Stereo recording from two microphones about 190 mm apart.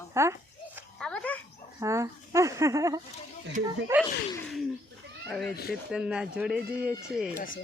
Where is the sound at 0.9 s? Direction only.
5° left (ahead or behind).